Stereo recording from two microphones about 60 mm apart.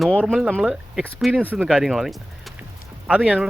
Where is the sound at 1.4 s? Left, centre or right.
Right.